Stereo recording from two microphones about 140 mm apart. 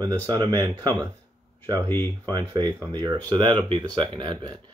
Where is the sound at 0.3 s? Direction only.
30° right (ahead or behind).